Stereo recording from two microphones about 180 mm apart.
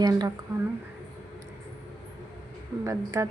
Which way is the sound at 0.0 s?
20° right (ahead or behind).